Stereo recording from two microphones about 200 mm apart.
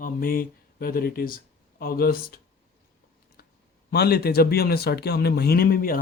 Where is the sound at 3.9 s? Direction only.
50° left (ahead or behind).